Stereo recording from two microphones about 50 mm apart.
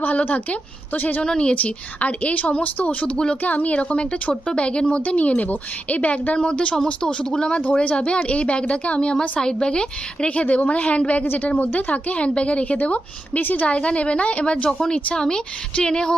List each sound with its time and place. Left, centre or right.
0.0 s a woman's voice: left
1.2 s a woman's voice: centre
5.0 s a woman's voice: left
13.7 s a woman's voice: left